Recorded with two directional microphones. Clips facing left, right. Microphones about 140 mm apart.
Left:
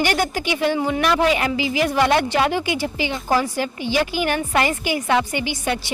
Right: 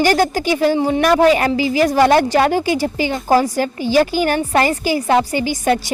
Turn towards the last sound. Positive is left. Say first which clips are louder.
# right 7 dB
turn(degrees=-40)  # may be behind; listen again after turning